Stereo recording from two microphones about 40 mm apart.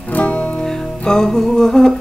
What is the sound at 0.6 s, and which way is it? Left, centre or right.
Music, centre.